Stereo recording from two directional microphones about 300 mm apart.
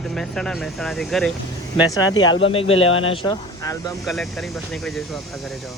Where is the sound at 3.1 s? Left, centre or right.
Centre.